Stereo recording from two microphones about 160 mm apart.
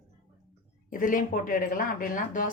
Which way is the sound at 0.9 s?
60° left (ahead or behind).